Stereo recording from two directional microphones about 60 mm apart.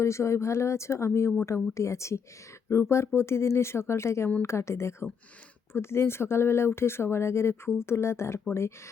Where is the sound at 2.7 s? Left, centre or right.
Left.